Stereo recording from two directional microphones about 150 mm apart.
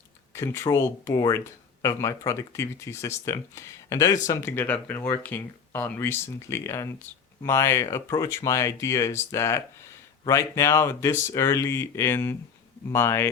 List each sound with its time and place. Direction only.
0.3 s speech: 15° left (ahead or behind)